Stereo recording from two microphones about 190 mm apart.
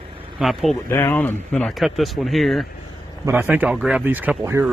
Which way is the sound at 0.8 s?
15° left (ahead or behind).